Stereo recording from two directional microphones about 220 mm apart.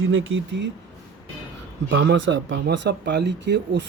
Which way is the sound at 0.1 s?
60° right (ahead or behind).